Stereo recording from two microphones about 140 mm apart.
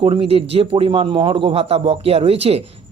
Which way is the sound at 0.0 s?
40° right (ahead or behind).